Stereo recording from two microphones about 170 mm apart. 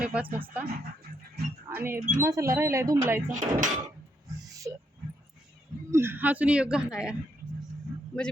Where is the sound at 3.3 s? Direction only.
45° right (ahead or behind).